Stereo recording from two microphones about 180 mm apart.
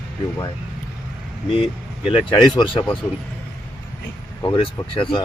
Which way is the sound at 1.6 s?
30° left (ahead or behind).